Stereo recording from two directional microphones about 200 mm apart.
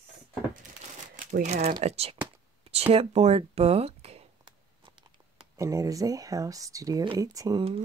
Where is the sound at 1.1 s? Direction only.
35° right (ahead or behind).